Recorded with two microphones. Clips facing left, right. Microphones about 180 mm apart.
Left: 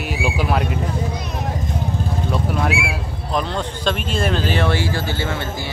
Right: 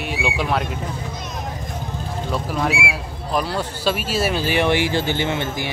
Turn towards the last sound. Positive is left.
turn(degrees=-20)  # may be behind; listen again after turning